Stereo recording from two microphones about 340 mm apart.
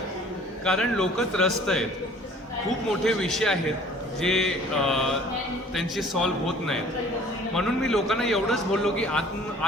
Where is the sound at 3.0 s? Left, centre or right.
Centre.